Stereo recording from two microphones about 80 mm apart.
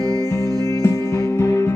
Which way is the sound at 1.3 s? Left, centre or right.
Left.